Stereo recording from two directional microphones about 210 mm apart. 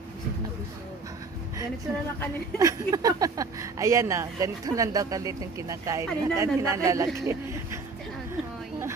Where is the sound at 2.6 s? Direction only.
15° right (ahead or behind).